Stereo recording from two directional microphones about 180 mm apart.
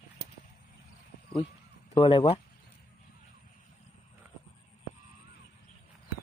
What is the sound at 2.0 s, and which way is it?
Speech, 30° left (ahead or behind).